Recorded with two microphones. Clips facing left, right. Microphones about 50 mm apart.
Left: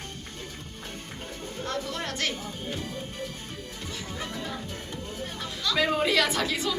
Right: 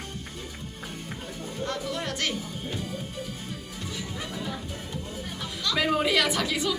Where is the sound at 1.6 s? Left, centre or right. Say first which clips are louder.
Right 1 dB; centre.